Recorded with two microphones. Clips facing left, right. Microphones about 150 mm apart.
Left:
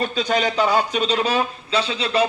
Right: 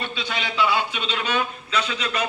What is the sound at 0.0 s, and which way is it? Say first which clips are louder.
Speech: left 9 dB; 40° left (ahead or behind).